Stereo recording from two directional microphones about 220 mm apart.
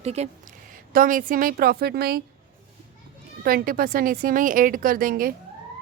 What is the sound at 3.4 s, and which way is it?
A woman's voice, 40° right (ahead or behind).